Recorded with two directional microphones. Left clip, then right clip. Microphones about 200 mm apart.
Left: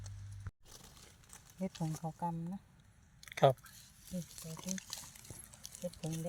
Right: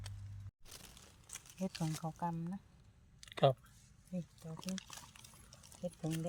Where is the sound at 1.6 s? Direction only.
15° left (ahead or behind).